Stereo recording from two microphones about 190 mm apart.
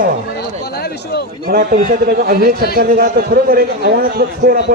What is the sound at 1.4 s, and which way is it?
A man's voice, 50° right (ahead or behind).